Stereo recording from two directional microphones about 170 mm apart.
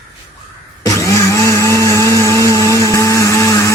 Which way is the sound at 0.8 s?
20° left (ahead or behind).